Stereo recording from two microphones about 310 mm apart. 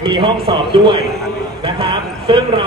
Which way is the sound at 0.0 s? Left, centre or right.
Centre.